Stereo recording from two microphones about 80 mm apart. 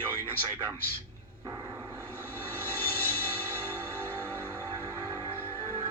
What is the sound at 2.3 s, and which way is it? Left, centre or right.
Music, left.